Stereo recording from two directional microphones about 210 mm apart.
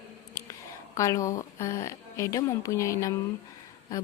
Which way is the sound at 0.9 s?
15° left (ahead or behind).